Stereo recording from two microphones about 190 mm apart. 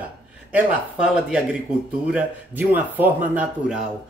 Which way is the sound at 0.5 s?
5° right (ahead or behind).